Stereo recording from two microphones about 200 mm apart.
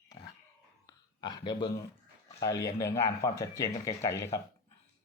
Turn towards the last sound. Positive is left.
turn(degrees=15)  # may be behind; listen again after turning